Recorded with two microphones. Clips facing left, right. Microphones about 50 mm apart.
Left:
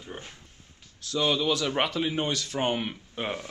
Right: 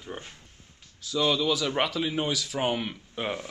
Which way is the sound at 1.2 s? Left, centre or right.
Centre.